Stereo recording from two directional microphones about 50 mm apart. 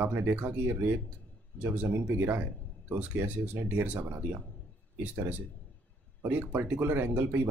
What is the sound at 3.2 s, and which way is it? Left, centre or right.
Speech, right.